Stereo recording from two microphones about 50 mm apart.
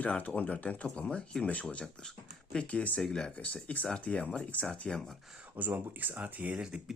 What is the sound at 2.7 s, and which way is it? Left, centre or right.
Speech, left.